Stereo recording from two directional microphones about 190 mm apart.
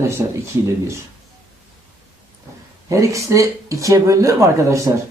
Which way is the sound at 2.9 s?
15° right (ahead or behind).